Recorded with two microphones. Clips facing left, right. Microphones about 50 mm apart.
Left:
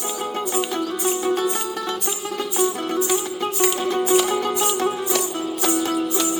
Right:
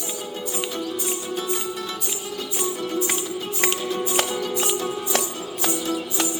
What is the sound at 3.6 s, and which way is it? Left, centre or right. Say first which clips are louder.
Music: left 4 dB; right.